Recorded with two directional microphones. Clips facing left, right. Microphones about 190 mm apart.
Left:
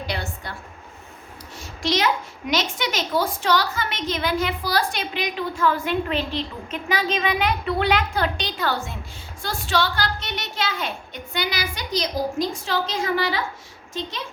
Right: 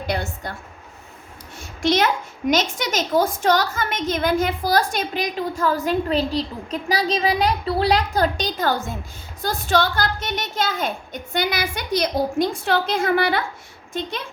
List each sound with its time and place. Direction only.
0.1 s a woman's voice: 45° right (ahead or behind)
1.5 s a woman's voice: 50° right (ahead or behind)